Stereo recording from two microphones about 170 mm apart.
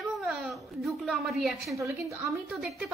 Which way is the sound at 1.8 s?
15° right (ahead or behind).